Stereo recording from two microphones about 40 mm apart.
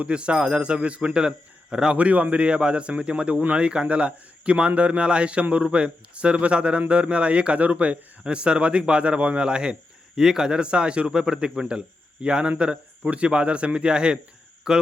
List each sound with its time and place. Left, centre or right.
0.1 s a man's voice: right
2.0 s a man's voice: right
8.2 s a man's voice: right